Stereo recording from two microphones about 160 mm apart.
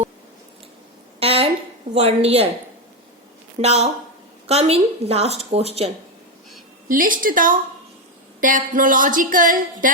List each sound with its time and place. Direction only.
1.2 s a sound: 35° right (ahead or behind)
2.0 s a woman's voice: 40° right (ahead or behind)
3.6 s a woman's voice: 40° right (ahead or behind)
6.8 s speech: 60° right (ahead or behind)